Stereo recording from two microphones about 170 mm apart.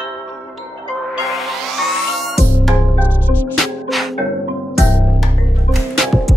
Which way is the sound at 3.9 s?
Centre (ahead or behind).